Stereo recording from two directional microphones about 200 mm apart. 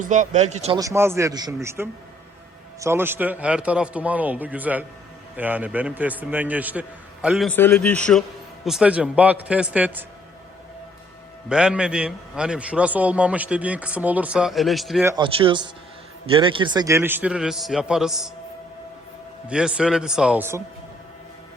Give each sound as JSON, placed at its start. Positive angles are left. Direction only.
{"t": 0.0, "sound": "speech", "side_deg": -40}
{"t": 0.8, "sound": "a man's voice", "side_deg": -15}
{"t": 8.6, "sound": "a man's voice", "side_deg": -5}
{"t": 11.4, "sound": "a man's voice", "side_deg": -5}
{"t": 15.0, "sound": "a man's voice", "side_deg": -20}
{"t": 19.5, "sound": "a man's voice", "side_deg": -5}